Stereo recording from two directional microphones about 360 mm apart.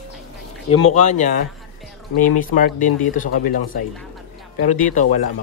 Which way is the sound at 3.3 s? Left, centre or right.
Left.